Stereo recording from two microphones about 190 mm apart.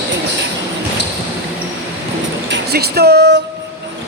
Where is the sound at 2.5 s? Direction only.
55° right (ahead or behind).